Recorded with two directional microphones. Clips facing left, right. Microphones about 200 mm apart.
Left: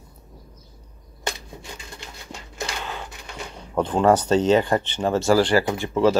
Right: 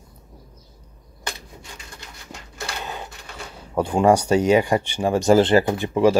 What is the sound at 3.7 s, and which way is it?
Speech, 10° right (ahead or behind).